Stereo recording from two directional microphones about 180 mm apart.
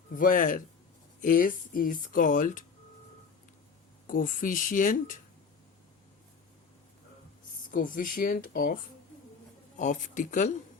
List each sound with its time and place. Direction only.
0.2 s speech: 50° left (ahead or behind)
4.0 s speech: 50° left (ahead or behind)
7.7 s speech: 50° left (ahead or behind)